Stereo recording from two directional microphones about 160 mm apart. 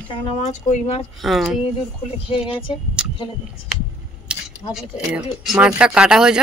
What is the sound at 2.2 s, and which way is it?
Speech, 35° left (ahead or behind).